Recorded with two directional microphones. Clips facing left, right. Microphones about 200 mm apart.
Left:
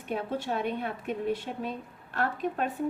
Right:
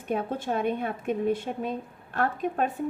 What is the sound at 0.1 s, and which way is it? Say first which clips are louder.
A woman's voice: right 3 dB; 50° right (ahead or behind).